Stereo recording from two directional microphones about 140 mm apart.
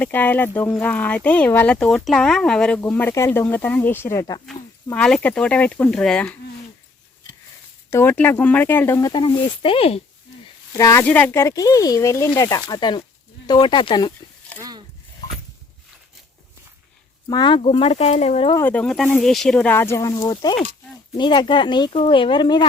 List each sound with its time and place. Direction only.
0.0 s speech: 10° left (ahead or behind)
4.9 s speech: 5° left (ahead or behind)
7.9 s speech: 20° left (ahead or behind)
9.2 s speech: 40° left (ahead or behind)
10.8 s speech: 25° left (ahead or behind)
11.0 s speech: 10° left (ahead or behind); by 14.1 s 30° left (ahead or behind)
17.2 s speech: 35° left (ahead or behind)
18.5 s speech: 15° left (ahead or behind)
19.7 s speech: 20° left (ahead or behind)